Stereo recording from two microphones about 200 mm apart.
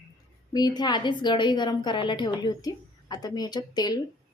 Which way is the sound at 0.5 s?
20° left (ahead or behind).